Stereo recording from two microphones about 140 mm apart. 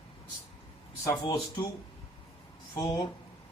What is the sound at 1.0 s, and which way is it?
Speech, 35° left (ahead or behind).